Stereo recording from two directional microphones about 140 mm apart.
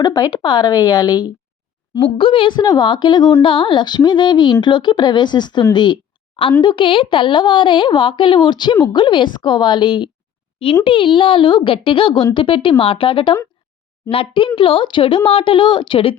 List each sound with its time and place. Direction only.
0.0 s a woman's voice: 30° left (ahead or behind)
2.0 s a woman's voice: 40° left (ahead or behind)
5.7 s a sound: 35° left (ahead or behind)
6.6 s a woman's voice: 35° left (ahead or behind)